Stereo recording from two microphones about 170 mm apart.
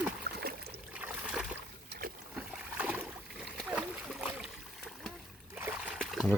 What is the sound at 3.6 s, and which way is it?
Splash, 5° right (ahead or behind).